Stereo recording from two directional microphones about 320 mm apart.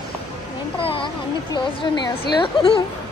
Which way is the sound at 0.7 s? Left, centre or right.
Centre.